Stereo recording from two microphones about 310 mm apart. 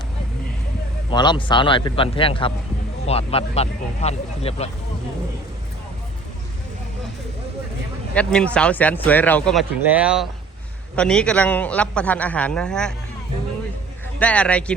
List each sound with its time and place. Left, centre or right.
1.1 s a man's voice: centre
8.1 s a man's voice: centre
14.2 s a man's voice: centre